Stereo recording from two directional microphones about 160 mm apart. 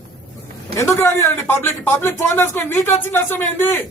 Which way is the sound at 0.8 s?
20° left (ahead or behind).